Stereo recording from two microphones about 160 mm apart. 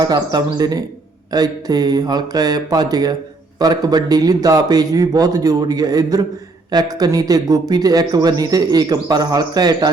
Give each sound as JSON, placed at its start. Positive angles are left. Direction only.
{"t": 0.0, "sound": "speech", "side_deg": -25}